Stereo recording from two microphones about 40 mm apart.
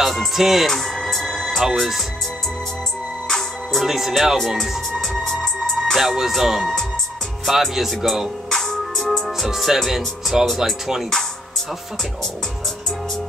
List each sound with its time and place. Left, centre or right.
0.0 s music: centre
0.7 s music: centre
1.8 s speech: centre
3.3 s music: centre
3.8 s speech: centre
5.3 s music: centre
5.9 s speech: centre
8.5 s music: centre
9.5 s speech: centre